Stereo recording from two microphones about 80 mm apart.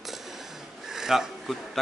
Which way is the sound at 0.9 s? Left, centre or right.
Centre.